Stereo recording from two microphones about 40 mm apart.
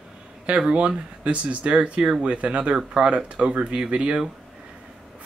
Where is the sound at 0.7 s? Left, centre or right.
Right.